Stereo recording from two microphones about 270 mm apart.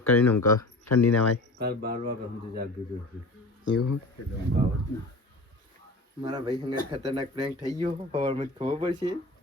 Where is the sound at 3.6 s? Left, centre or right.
Left.